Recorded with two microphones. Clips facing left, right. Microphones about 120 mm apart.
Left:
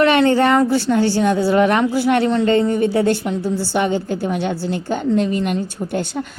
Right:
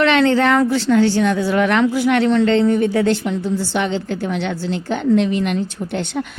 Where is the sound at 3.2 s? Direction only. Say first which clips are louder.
Even; 5° left (ahead or behind).